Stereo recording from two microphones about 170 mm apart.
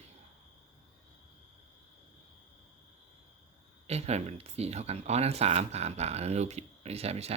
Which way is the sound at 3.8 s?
40° right (ahead or behind).